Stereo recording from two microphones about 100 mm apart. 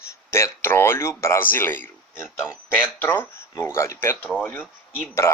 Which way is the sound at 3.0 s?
25° left (ahead or behind).